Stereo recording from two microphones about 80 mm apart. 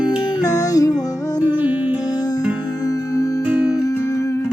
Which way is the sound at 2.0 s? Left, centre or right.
Left.